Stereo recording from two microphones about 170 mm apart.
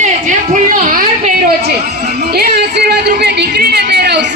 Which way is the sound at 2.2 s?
70° right (ahead or behind).